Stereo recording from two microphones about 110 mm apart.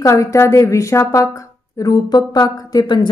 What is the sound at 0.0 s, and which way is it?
A woman's voice, 30° left (ahead or behind).